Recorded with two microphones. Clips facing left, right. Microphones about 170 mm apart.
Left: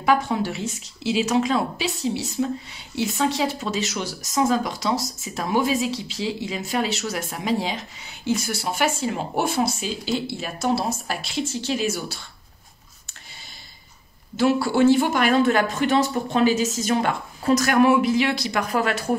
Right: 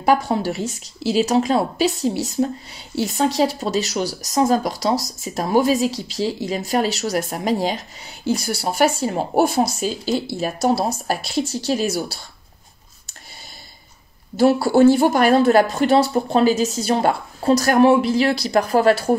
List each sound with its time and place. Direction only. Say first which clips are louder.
0.0 s speech: right 3 dB; 35° right (ahead or behind)
14.3 s speech: right 5 dB; 40° right (ahead or behind)